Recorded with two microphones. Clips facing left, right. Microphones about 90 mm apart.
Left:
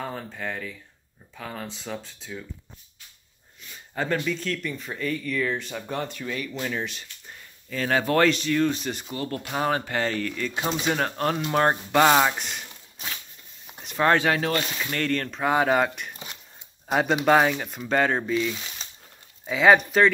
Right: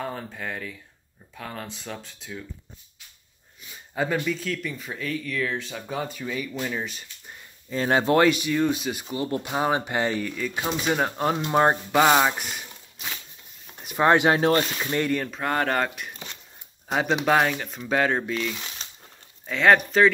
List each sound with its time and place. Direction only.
0.0 s speech: centre (ahead or behind)
3.9 s speech: 5° right (ahead or behind)
7.7 s speech: 25° right (ahead or behind)
8.3 s speech: 10° right (ahead or behind)
9.1 s speech: 20° right (ahead or behind)
12.0 s speech: 5° right (ahead or behind)
13.8 s speech: 15° right (ahead or behind)
15.3 s speech: 5° left (ahead or behind)
16.1 s a sound: 15° left (ahead or behind)
16.9 s speech: centre (ahead or behind)